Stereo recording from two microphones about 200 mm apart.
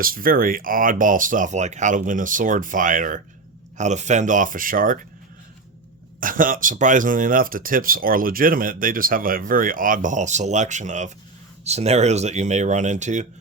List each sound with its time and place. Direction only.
0.0 s speech: 45° right (ahead or behind)
6.1 s speech: 45° right (ahead or behind)